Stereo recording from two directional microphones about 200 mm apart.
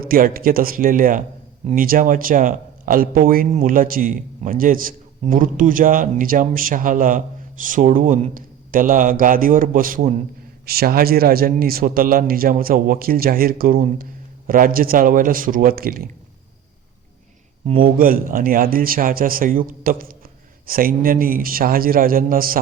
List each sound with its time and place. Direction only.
0.0 s speech: 45° right (ahead or behind)
17.7 s speech: 45° right (ahead or behind)